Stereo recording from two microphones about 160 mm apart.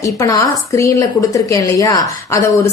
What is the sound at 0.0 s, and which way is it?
A woman's voice, 20° left (ahead or behind).